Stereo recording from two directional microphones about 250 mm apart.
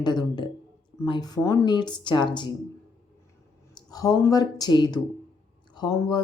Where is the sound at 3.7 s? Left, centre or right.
Centre.